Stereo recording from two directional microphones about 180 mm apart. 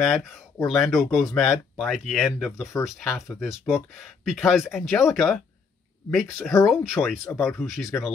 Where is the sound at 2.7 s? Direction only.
15° left (ahead or behind).